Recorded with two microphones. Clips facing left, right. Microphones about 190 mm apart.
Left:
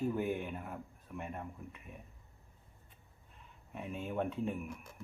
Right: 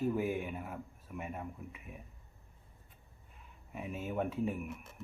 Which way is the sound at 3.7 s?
5° right (ahead or behind).